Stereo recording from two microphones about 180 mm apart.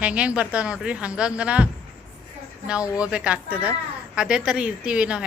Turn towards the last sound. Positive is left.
turn(degrees=-5)  # may be behind; listen again after turning